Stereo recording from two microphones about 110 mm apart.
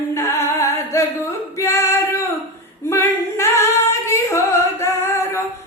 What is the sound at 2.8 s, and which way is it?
Singing, 25° left (ahead or behind).